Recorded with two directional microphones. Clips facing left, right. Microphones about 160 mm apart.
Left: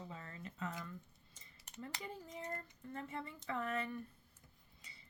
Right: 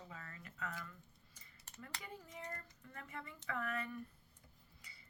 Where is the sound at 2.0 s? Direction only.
25° left (ahead or behind).